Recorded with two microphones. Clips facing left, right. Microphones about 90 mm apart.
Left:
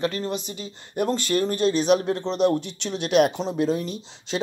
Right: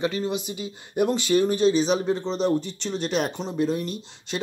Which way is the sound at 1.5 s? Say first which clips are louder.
Even; 55° left (ahead or behind).